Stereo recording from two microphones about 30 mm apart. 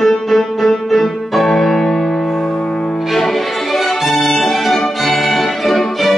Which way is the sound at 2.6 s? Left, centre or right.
Left.